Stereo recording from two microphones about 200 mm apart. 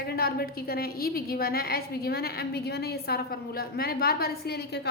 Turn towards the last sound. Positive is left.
turn(degrees=55)  # may be behind; listen again after turning